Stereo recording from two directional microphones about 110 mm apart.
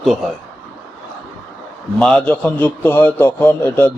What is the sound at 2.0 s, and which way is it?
A man's voice, 5° left (ahead or behind).